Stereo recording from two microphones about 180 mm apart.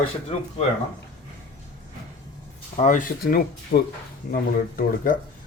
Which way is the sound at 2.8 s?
45° left (ahead or behind).